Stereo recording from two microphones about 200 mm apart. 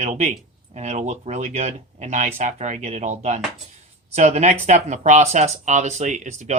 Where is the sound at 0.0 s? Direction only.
35° right (ahead or behind).